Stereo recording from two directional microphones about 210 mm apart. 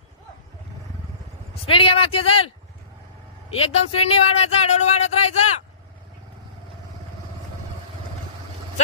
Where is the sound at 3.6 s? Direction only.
30° left (ahead or behind).